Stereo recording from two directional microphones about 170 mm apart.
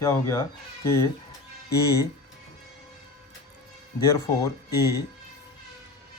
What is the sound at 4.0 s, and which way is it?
Speech, 20° left (ahead or behind).